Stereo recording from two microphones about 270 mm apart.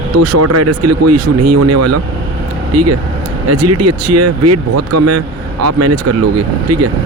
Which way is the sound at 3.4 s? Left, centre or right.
Right.